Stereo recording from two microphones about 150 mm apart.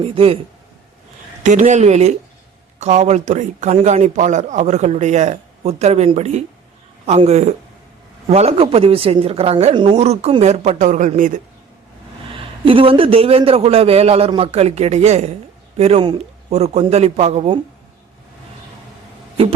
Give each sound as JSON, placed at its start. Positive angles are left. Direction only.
{"t": 0.0, "sound": "a man's voice", "side_deg": -40}
{"t": 1.5, "sound": "a man's voice", "side_deg": -55}
{"t": 12.6, "sound": "a man's voice", "side_deg": -35}